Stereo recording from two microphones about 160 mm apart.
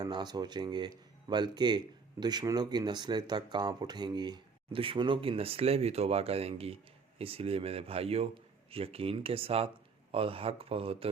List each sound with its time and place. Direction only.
0.0 s speech: 25° right (ahead or behind)